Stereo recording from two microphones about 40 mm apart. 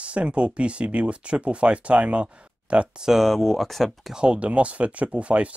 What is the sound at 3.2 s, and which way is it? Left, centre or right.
Speech, centre.